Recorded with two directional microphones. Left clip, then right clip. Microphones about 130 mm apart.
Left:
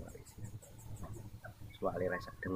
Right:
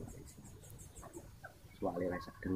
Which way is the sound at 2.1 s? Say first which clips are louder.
Left 3 dB; 20° left (ahead or behind).